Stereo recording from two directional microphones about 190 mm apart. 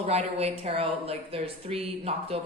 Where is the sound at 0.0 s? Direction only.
35° right (ahead or behind).